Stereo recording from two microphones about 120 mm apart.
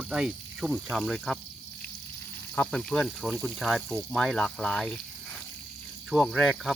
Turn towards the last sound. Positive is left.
turn(degrees=0)  # may be behind; listen again after turning